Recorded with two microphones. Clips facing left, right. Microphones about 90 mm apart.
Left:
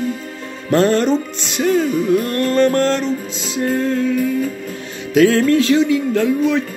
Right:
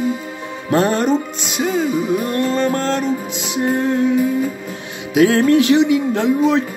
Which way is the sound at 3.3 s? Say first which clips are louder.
Right 1 dB; 20° right (ahead or behind).